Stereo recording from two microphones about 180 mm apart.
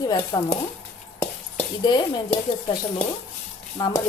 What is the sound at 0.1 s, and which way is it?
Speech, 20° left (ahead or behind).